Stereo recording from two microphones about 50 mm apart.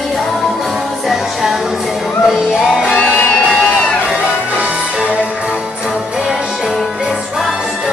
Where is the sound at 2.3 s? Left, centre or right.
Centre.